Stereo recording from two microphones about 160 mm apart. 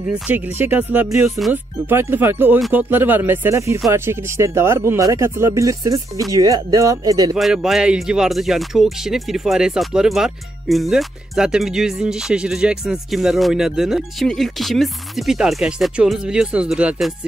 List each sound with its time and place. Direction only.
0.1 s speech: 10° right (ahead or behind)
7.3 s speech: centre (ahead or behind)